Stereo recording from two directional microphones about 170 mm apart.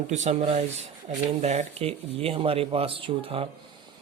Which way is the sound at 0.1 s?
45° right (ahead or behind).